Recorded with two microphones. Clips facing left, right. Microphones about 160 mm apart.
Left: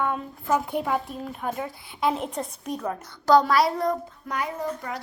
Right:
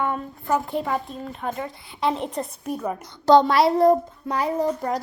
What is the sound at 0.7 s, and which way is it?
A woman's voice, 5° left (ahead or behind).